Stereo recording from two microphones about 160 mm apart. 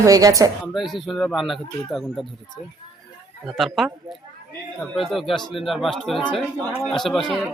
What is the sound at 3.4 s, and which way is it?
Speech, centre (ahead or behind).